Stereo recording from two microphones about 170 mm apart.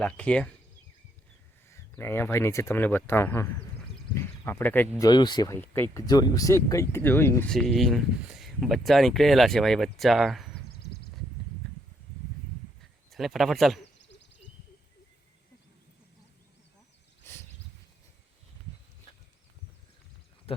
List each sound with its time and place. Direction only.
0.0 s speech: 5° left (ahead or behind)
1.7 s speech: 15° left (ahead or behind)
4.9 s speech: 25° left (ahead or behind)
5.5 s speech: 10° left (ahead or behind)
7.5 s speech: centre (ahead or behind)
12.8 s speech: centre (ahead or behind)
17.2 s a sound: 15° left (ahead or behind)